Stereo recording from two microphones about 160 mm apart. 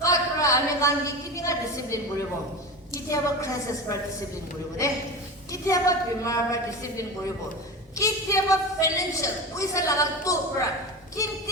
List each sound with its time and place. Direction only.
0.0 s a sound: 20° left (ahead or behind)
2.9 s a woman's voice: 20° left (ahead or behind)
5.5 s a woman's voice: 20° left (ahead or behind)